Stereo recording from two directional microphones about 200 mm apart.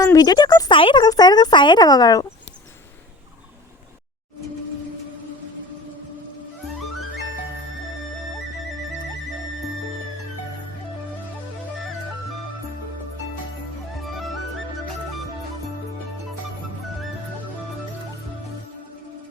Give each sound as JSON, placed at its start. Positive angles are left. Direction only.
{"t": 0.0, "sound": "speech", "side_deg": 15}